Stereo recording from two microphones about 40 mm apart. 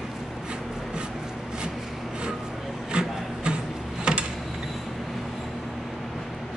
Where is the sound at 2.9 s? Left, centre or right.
Right.